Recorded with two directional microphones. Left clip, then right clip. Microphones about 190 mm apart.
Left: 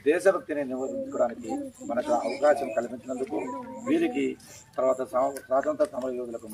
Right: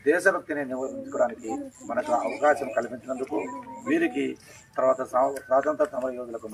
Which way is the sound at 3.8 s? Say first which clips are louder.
Right 1 dB; 15° right (ahead or behind).